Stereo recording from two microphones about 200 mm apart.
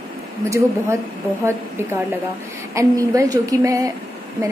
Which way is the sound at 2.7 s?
15° right (ahead or behind).